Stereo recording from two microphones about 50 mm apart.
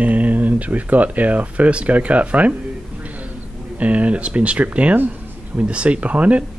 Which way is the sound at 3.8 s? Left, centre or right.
Right.